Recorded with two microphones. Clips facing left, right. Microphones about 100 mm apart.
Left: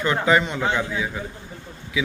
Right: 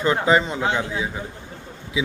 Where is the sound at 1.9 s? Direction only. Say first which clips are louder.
Right 1 dB; 25° right (ahead or behind).